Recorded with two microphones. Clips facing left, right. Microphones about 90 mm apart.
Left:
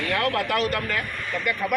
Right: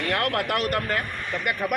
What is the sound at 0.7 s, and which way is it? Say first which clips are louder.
Speech: right 1 dB; 40° right (ahead or behind).